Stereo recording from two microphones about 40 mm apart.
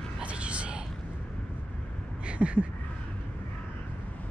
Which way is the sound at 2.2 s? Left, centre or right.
Right.